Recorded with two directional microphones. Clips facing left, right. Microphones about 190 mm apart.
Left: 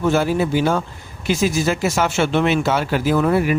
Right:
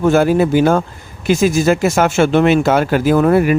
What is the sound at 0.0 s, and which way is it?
Speech, 50° right (ahead or behind).